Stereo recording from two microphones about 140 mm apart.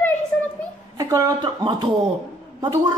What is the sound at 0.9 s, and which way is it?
A woman's voice, 25° right (ahead or behind).